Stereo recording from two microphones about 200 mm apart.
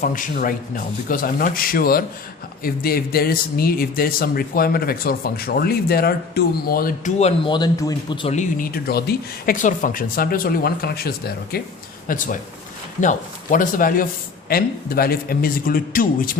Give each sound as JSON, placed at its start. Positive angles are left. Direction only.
{"t": 0.0, "sound": "speech", "side_deg": 40}
{"t": 8.4, "sound": "speech", "side_deg": 45}